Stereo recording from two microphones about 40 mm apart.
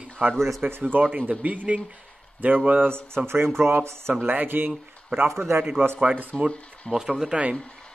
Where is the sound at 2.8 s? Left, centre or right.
Right.